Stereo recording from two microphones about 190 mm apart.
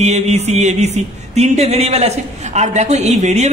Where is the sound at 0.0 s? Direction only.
35° right (ahead or behind).